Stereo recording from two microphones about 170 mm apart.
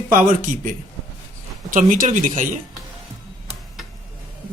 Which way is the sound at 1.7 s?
50° right (ahead or behind).